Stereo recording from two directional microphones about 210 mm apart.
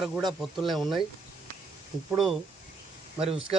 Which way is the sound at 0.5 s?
Centre (ahead or behind).